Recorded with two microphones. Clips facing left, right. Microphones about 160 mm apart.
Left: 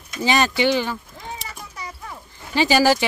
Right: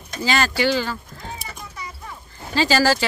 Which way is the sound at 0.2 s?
20° left (ahead or behind).